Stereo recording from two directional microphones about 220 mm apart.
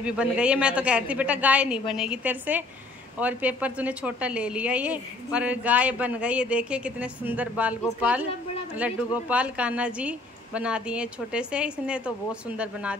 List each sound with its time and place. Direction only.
0.0 s a woman's voice: 5° right (ahead or behind)